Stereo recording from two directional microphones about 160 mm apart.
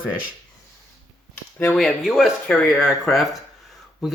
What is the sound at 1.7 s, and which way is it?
Speech, centre (ahead or behind).